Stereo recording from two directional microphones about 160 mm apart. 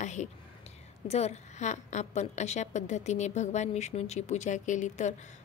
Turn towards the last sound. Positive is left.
turn(degrees=50)  # may be behind; listen again after turning